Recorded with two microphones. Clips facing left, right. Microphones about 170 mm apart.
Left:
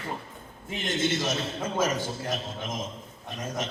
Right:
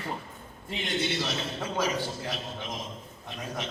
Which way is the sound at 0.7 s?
45° left (ahead or behind).